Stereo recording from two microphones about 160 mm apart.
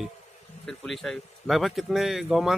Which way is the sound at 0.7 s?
Centre (ahead or behind).